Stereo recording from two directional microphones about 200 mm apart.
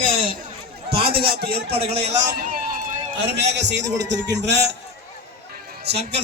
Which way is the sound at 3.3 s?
60° right (ahead or behind).